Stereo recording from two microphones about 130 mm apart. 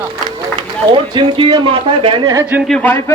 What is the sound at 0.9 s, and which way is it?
Speech, 40° right (ahead or behind).